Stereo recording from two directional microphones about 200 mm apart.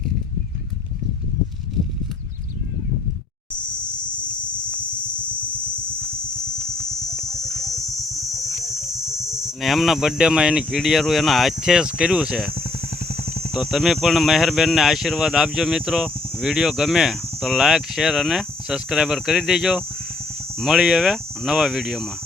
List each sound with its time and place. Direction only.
8.7 s speech: centre (ahead or behind)
13.2 s a sound: 40° left (ahead or behind)
13.5 s speech: centre (ahead or behind)